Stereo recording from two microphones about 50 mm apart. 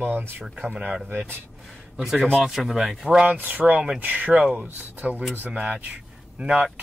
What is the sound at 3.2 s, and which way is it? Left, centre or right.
Speech, right.